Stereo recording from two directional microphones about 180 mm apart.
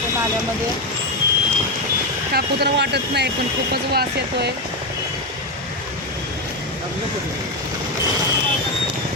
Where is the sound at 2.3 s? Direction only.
65° right (ahead or behind).